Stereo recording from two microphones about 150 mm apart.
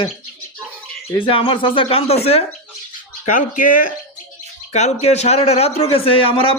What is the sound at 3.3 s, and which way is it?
Speech, 60° left (ahead or behind).